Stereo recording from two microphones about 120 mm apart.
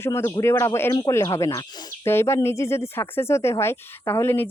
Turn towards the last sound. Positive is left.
turn(degrees=20)  # may be behind; listen again after turning